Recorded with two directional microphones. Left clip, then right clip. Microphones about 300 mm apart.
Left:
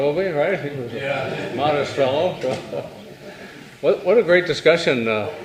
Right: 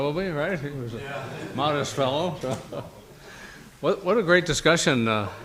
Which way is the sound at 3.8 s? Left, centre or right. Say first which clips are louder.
Left 7 dB; right.